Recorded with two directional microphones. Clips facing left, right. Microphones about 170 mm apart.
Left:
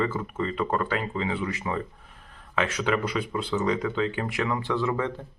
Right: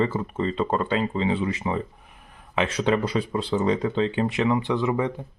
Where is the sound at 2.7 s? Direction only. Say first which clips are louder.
Right 5 dB; 30° right (ahead or behind); by 5.2 s 15° right (ahead or behind).